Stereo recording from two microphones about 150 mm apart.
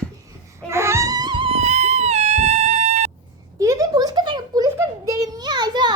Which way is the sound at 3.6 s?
25° right (ahead or behind).